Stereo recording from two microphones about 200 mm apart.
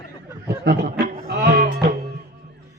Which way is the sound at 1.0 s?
50° right (ahead or behind).